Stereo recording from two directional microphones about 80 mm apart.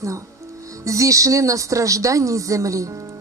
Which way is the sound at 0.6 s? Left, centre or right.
Right.